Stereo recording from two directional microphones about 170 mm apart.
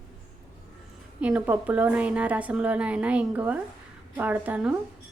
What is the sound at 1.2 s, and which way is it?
A woman's voice, 10° right (ahead or behind).